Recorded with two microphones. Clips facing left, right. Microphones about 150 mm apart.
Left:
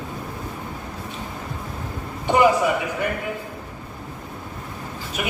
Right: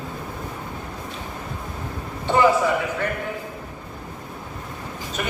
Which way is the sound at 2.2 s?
15° left (ahead or behind).